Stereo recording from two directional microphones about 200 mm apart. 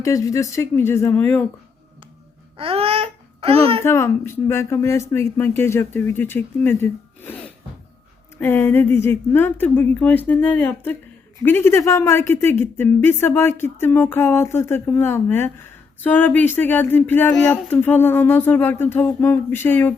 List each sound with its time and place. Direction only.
0.0 s speech: 15° left (ahead or behind)
2.6 s babbling: 30° right (ahead or behind)
3.8 s speech: 15° left (ahead or behind)